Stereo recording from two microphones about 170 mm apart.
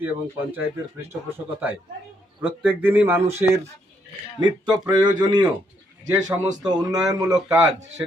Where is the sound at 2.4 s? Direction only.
10° right (ahead or behind).